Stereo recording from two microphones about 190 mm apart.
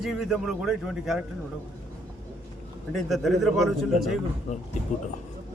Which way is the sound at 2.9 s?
Centre (ahead or behind).